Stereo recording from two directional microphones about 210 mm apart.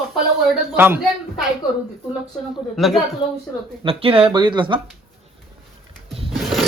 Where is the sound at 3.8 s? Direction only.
25° right (ahead or behind).